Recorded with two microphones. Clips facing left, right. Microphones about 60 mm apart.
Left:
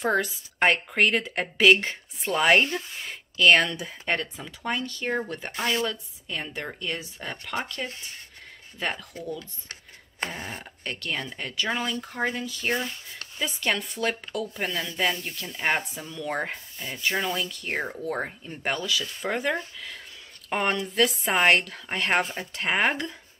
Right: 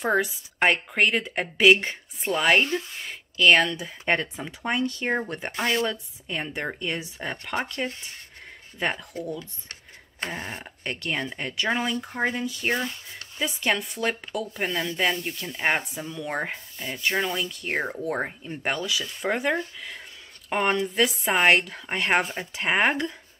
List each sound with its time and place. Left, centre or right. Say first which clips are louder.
0.0 s speech: right 1 dB; centre
2.3 s speech: left 1 dB; centre
4.0 s speech: right 4 dB; right